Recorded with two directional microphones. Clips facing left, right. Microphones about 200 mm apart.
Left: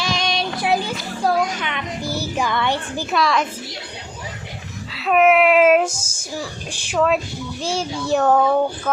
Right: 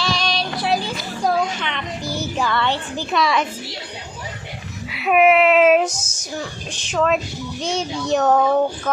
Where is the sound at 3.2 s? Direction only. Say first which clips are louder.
Even; centre (ahead or behind).